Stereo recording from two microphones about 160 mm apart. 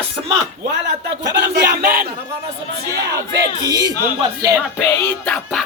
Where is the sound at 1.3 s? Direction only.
80° right.